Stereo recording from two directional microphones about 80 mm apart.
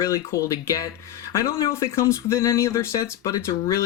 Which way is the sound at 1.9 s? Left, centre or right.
Left.